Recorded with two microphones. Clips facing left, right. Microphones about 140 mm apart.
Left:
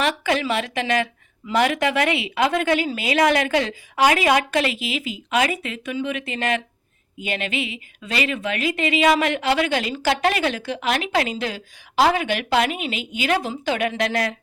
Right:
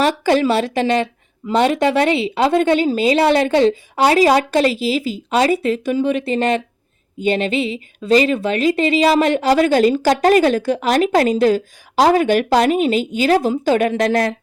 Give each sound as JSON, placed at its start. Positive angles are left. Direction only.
{"t": 0.0, "sound": "speech", "side_deg": -35}